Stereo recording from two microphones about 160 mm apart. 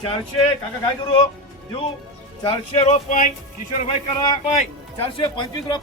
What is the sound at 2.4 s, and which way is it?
Speech, 45° left (ahead or behind).